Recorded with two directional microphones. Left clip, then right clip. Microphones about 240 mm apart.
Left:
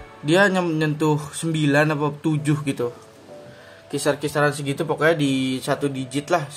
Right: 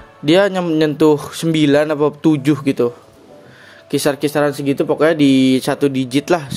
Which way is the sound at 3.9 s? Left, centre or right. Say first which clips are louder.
Right 6 dB; right.